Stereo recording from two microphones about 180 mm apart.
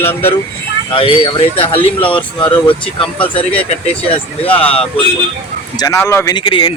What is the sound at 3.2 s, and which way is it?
Speech, 5° left (ahead or behind).